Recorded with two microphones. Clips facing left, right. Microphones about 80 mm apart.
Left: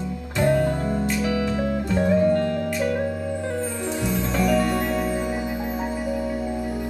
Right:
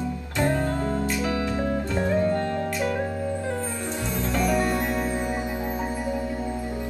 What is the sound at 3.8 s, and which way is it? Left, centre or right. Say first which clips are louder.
Music: left 3 dB; centre.